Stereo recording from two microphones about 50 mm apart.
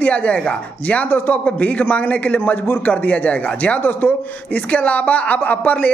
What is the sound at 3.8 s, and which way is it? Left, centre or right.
Speech, left.